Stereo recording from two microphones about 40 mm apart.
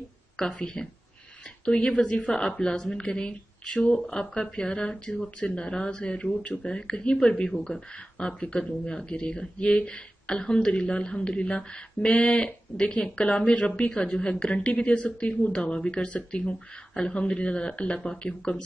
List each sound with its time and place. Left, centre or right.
0.4 s speech: left
14.1 s speech: left